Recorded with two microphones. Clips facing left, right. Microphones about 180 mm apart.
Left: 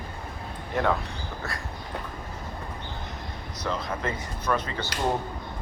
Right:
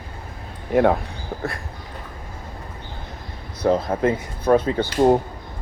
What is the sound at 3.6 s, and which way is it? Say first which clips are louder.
Speech: right 11 dB; 50° right (ahead or behind).